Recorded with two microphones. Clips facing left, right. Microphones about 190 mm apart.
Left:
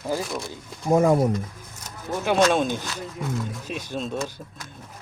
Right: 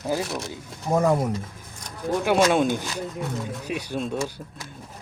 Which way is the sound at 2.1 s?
15° right (ahead or behind).